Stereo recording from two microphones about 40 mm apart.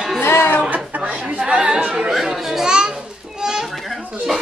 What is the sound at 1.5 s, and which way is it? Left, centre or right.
Chatter, right.